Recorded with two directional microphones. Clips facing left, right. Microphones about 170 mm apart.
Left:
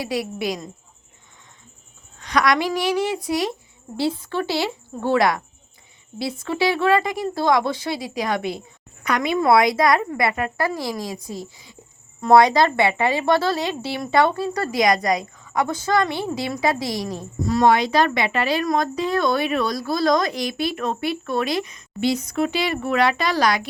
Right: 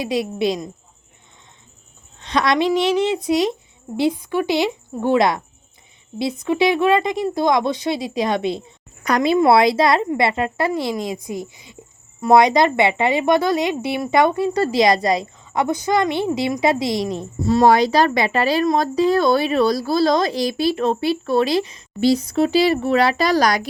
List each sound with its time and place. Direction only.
0.0 s speech: 20° right (ahead or behind)
2.1 s a woman's voice: 25° right (ahead or behind)
9.0 s speech: 35° right (ahead or behind)